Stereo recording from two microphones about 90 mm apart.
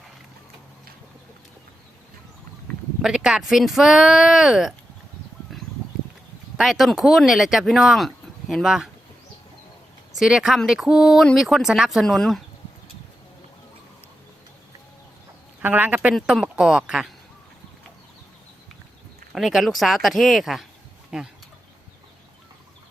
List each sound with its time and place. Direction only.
3.0 s speech: 5° right (ahead or behind)
6.6 s speech: centre (ahead or behind)
10.2 s speech: 5° right (ahead or behind)
15.6 s speech: 20° right (ahead or behind)
16.3 s speech: 5° right (ahead or behind)
19.3 s speech: 5° right (ahead or behind)